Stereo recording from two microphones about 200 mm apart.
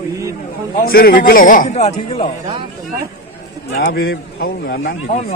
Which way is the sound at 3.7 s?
50° left (ahead or behind).